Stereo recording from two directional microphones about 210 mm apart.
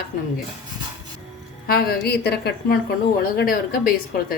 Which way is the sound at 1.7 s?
45° left (ahead or behind).